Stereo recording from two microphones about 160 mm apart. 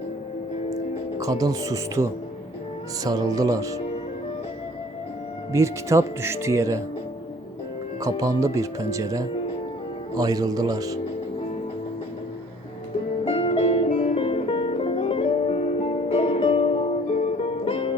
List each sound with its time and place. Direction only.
1.2 s speech: 20° right (ahead or behind)
5.5 s speech: 20° right (ahead or behind)
8.2 s speech: 20° right (ahead or behind)
13.2 s music: 35° left (ahead or behind)
14.2 s music: 35° left (ahead or behind)